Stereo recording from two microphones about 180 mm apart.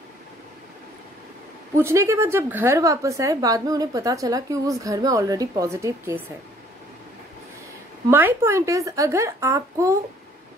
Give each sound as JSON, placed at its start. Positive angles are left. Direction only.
{"t": 1.8, "sound": "a woman's voice", "side_deg": -15}
{"t": 8.1, "sound": "a woman's voice", "side_deg": -10}